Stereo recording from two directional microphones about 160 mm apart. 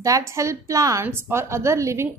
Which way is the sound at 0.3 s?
20° right (ahead or behind).